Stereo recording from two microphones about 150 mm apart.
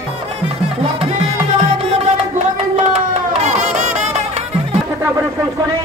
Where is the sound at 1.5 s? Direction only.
45° right (ahead or behind).